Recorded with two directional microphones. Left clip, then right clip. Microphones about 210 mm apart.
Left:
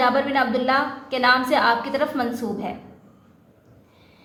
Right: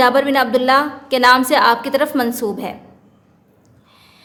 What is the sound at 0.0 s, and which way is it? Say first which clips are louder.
A woman's voice: right 6 dB; 55° right (ahead or behind).